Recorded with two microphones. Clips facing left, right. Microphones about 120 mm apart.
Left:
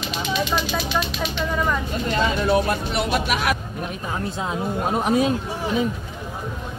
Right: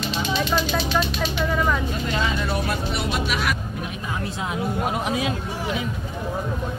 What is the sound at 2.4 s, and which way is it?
Speech, 55° left (ahead or behind).